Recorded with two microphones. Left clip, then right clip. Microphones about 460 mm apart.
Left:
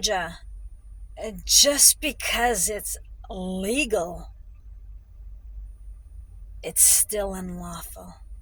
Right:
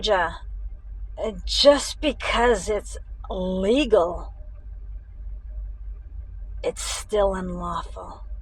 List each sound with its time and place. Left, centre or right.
0.0 s a woman's voice: left
6.7 s a woman's voice: left